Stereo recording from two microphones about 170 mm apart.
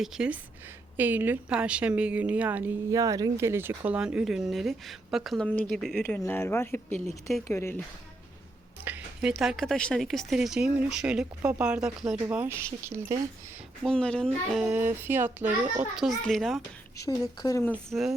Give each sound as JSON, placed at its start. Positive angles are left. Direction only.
{"t": 0.0, "sound": "a woman's voice", "side_deg": -5}
{"t": 6.2, "sound": "speech", "side_deg": 15}
{"t": 8.8, "sound": "a woman's voice", "side_deg": -5}
{"t": 13.8, "sound": "speech", "side_deg": 5}
{"t": 14.8, "sound": "a woman's voice", "side_deg": -15}
{"t": 17.1, "sound": "speech", "side_deg": 20}
{"t": 17.7, "sound": "speech", "side_deg": 0}